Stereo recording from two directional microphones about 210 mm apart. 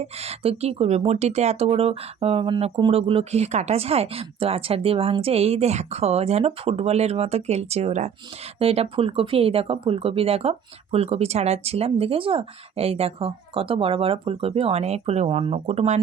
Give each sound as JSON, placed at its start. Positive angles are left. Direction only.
{"t": 0.0, "sound": "speech", "side_deg": -30}